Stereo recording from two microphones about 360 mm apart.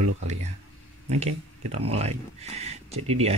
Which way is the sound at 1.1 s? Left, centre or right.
Centre.